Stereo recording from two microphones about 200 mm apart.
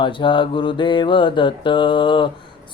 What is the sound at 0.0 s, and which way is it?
Mantra, 25° left (ahead or behind).